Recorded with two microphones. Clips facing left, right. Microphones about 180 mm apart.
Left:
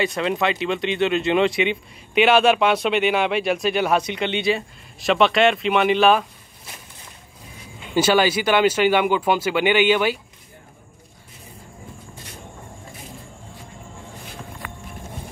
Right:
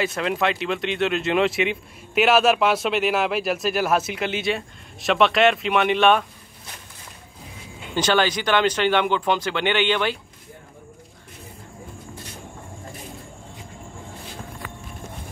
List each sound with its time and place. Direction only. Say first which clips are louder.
0.0 s speech: left 1 dB; centre (ahead or behind)
7.9 s speech: left 3 dB; 10° left (ahead or behind)
14.6 s a sound: left 1 dB; 60° left (ahead or behind)